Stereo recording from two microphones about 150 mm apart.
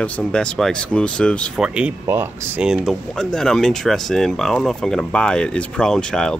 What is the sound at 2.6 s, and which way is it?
Speech, 5° right (ahead or behind).